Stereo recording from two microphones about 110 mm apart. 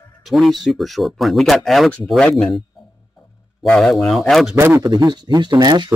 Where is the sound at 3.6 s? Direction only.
5° left (ahead or behind).